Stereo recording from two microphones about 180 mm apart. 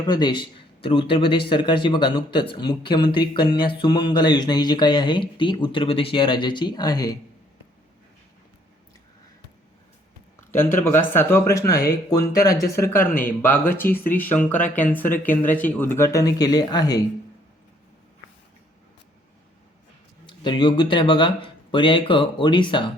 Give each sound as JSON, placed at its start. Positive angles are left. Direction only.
{"t": 0.0, "sound": "speech", "side_deg": 25}
{"t": 10.5, "sound": "speech", "side_deg": 10}
{"t": 20.2, "sound": "speech", "side_deg": 25}